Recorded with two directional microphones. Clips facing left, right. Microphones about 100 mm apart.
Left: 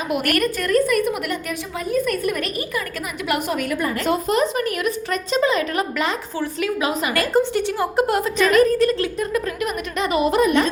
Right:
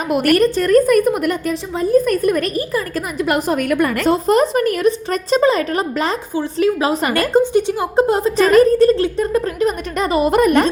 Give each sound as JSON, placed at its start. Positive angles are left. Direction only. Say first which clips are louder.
{"t": 0.1, "sound": "speech", "louder": "right 8 dB", "side_deg": -40}
{"t": 0.7, "sound": "a woman's voice", "louder": "right 5 dB", "side_deg": -45}
{"t": 1.7, "sound": "a woman's voice", "louder": "right 9 dB", "side_deg": -30}
{"t": 2.0, "sound": "a woman's voice", "louder": "right 6 dB", "side_deg": -40}
{"t": 4.0, "sound": "speech", "louder": "right 4 dB", "side_deg": -40}
{"t": 7.3, "sound": "a woman's voice", "louder": "right 5 dB", "side_deg": -20}